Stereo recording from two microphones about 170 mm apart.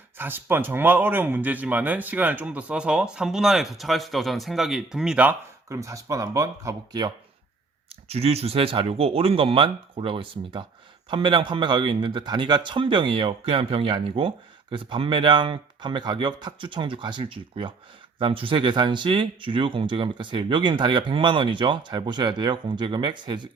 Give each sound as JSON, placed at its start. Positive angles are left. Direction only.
{"t": 0.2, "sound": "speech", "side_deg": -10}
{"t": 7.9, "sound": "a man's voice", "side_deg": -35}